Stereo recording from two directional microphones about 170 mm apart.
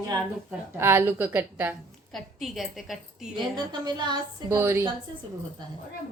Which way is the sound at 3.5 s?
25° right (ahead or behind).